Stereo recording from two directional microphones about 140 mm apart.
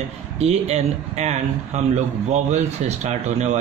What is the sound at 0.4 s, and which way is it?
Speech, 50° right (ahead or behind).